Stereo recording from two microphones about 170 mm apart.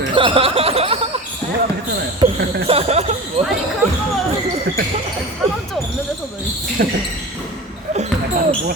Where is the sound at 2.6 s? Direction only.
35° right (ahead or behind).